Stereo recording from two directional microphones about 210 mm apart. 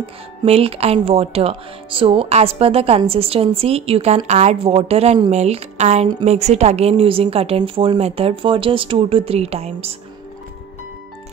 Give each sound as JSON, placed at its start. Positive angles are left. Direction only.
{"t": 0.0, "sound": "speech", "side_deg": -25}